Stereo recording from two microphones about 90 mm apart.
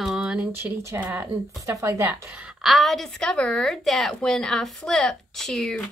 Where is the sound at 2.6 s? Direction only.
Centre (ahead or behind).